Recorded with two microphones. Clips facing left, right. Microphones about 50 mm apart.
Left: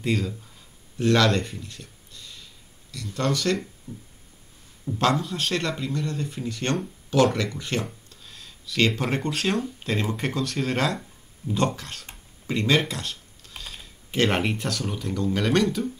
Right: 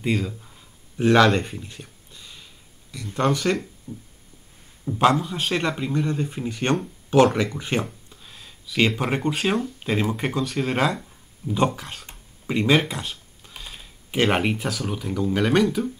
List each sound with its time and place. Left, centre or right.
0.0 s speech: centre
0.9 s a sound: right
3.2 s speech: centre
3.9 s music: centre
4.8 s a man's voice: centre